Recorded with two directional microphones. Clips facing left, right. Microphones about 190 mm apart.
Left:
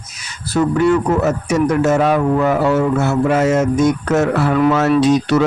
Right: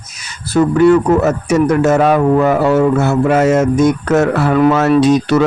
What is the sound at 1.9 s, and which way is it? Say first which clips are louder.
Speech: right 3 dB; 55° right (ahead or behind).